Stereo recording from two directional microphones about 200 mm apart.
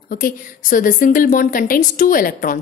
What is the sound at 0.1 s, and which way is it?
A woman's voice, 45° left (ahead or behind).